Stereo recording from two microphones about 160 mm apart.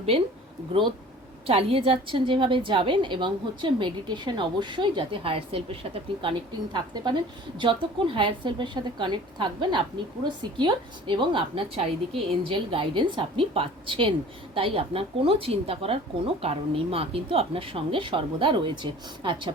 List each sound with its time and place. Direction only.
1.5 s a woman's voice: 35° right (ahead or behind)